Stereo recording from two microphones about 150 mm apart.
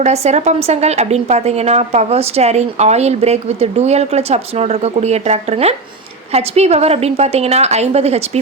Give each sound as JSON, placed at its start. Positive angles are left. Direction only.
{"t": 0.0, "sound": "a woman's voice", "side_deg": -50}